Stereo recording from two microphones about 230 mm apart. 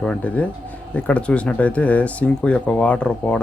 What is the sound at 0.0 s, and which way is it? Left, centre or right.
Speech, centre.